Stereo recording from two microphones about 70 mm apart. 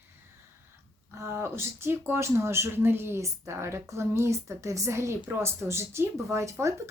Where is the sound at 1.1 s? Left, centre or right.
Right.